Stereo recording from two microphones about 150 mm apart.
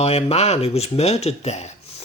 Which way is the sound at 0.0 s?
40° left (ahead or behind).